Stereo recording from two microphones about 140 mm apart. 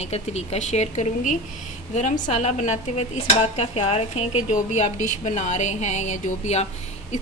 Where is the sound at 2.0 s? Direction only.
60° left (ahead or behind).